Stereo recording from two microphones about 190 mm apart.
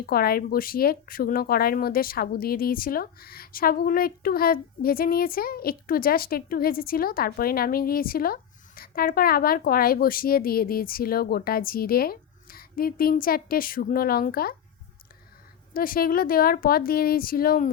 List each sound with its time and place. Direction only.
0.0 s speech: 50° left (ahead or behind)
15.7 s speech: 50° left (ahead or behind)